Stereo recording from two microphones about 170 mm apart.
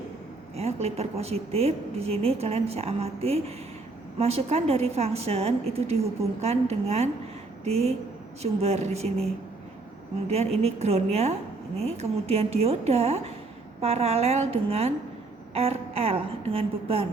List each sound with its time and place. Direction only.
0.5 s a woman's voice: 35° right (ahead or behind)
10.2 s a woman's voice: 40° right (ahead or behind)